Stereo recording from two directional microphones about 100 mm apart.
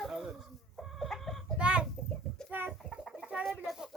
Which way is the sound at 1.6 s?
10° right (ahead or behind).